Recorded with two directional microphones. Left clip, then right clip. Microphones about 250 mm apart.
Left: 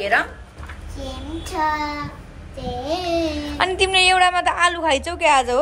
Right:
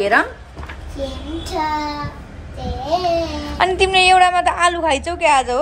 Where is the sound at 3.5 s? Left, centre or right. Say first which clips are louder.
Right 4 dB; centre.